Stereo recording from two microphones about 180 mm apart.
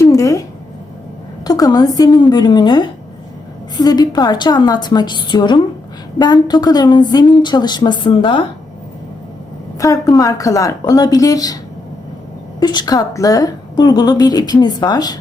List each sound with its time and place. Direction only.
0.0 s a sound: 15° left (ahead or behind)
1.5 s a woman's voice: 20° left (ahead or behind)
9.8 s a woman's voice: 20° left (ahead or behind)
12.5 s a woman's voice: 20° left (ahead or behind)